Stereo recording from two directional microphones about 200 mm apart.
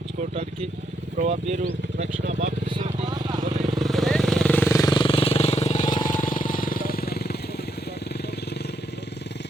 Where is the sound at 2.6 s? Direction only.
30° right (ahead or behind).